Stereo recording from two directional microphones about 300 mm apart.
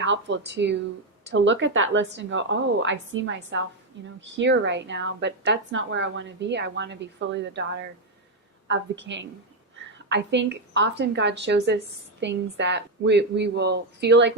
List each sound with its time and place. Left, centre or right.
0.0 s a woman's voice: right